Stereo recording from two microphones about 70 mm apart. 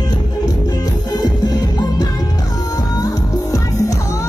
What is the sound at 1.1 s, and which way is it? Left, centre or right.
Music, left.